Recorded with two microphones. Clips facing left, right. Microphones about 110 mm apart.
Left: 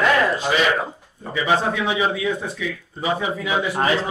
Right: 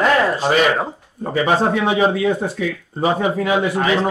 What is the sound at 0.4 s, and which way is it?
Speech, 40° right (ahead or behind).